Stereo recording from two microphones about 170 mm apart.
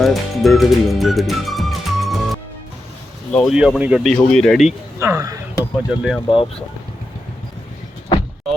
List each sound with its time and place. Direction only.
0.0 s speech: centre (ahead or behind)
4.9 s speech: 15° right (ahead or behind)
5.9 s speech: 5° right (ahead or behind)
6.1 s speech: 30° left (ahead or behind)